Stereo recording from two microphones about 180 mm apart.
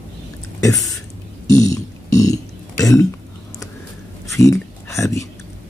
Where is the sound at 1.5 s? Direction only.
20° left (ahead or behind).